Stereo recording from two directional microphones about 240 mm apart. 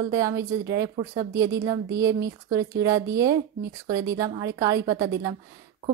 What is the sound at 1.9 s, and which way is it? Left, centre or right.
Speech, centre.